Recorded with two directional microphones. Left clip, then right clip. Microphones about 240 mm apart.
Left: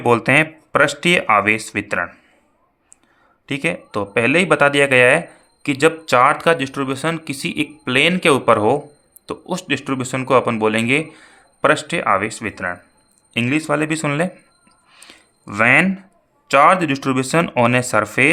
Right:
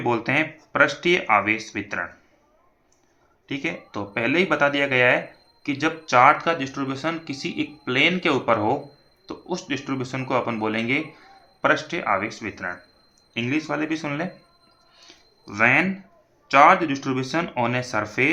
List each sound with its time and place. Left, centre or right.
0.0 s speech: left
3.4 s speech: left
14.9 s a sound: left
16.5 s speech: left